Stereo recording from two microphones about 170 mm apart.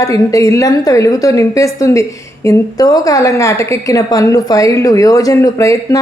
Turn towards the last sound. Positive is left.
turn(degrees=20)  # may be behind; listen again after turning